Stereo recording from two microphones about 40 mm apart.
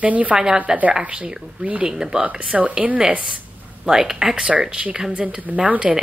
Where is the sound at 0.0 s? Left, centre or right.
Right.